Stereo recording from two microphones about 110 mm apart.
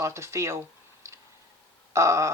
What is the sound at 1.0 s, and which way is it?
Tick, 25° right (ahead or behind).